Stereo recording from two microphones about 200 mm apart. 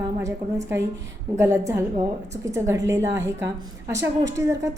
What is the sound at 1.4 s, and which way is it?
A woman's voice, 15° right (ahead or behind).